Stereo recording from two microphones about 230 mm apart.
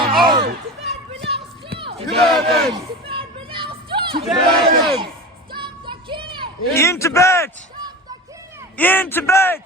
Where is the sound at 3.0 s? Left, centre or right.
Right.